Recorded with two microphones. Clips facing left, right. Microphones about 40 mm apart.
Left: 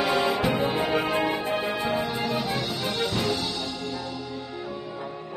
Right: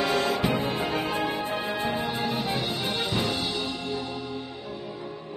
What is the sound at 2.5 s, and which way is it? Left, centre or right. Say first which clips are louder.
Music: even; centre.